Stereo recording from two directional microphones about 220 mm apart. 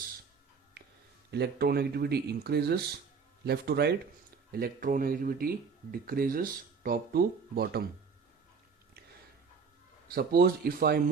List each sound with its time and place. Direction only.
1.3 s speech: 45° right (ahead or behind)
10.1 s speech: 45° right (ahead or behind)